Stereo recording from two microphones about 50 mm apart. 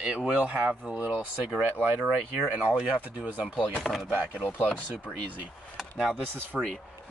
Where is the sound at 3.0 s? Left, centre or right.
Right.